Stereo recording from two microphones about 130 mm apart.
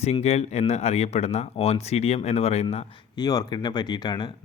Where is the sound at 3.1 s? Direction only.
30° left (ahead or behind).